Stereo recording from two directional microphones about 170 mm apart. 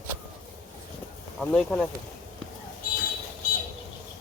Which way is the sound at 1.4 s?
5° left (ahead or behind).